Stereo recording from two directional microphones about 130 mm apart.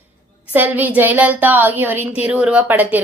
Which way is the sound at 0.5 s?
15° right (ahead or behind).